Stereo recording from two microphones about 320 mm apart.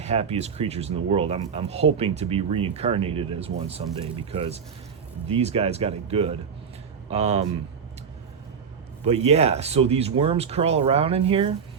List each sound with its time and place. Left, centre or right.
0.0 s speech: centre
9.0 s speech: centre